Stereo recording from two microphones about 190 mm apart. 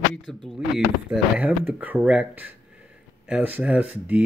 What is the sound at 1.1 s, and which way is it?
Speech, 10° right (ahead or behind).